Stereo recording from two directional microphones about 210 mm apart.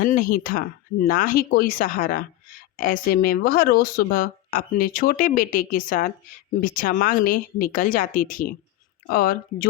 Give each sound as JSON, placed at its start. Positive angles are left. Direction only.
{"t": 0.0, "sound": "speech", "side_deg": 40}